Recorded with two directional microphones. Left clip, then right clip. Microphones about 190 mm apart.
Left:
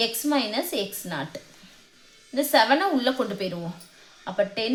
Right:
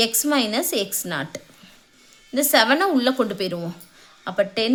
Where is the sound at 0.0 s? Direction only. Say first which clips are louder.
Right 4 dB; 45° right (ahead or behind).